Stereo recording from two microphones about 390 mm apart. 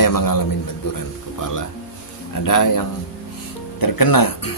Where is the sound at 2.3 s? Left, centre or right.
Left.